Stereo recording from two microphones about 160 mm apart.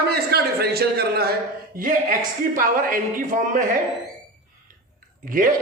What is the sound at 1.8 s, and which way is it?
Speech, 55° right (ahead or behind).